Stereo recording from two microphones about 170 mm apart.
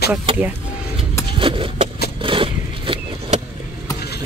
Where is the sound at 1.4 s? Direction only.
30° right (ahead or behind).